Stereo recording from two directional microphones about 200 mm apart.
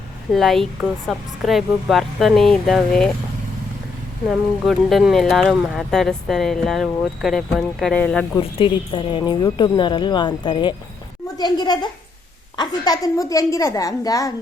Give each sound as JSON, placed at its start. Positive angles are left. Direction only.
{"t": 0.3, "sound": "speech", "side_deg": 0}
{"t": 4.3, "sound": "speech", "side_deg": 0}
{"t": 8.4, "sound": "a woman's voice", "side_deg": 25}